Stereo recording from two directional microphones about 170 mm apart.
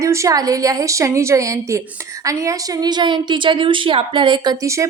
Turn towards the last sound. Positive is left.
turn(degrees=-15)  # may be behind; listen again after turning